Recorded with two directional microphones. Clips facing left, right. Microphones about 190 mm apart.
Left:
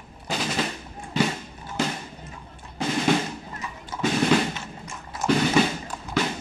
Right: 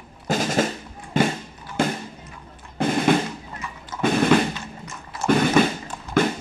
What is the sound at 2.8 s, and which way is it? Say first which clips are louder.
Drum: right 5 dB; 55° right (ahead or behind).